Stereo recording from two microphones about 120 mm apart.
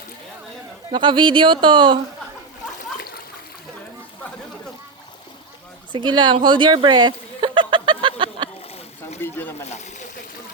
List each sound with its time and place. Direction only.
0.9 s speech: 40° right (ahead or behind)
5.9 s chuckle: 40° right (ahead or behind)
9.2 s speech: 20° left (ahead or behind)
9.6 s a sound: 75° left (ahead or behind)